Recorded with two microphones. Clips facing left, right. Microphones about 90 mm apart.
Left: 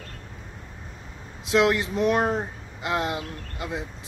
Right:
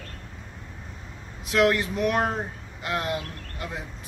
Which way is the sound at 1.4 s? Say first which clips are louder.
Left 1 dB; 20° left (ahead or behind).